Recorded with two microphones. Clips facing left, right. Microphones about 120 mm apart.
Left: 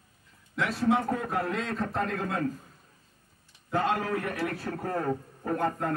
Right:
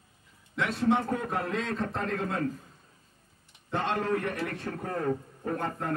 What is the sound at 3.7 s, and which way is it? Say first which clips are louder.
Speech: left 1 dB; 5° left (ahead or behind).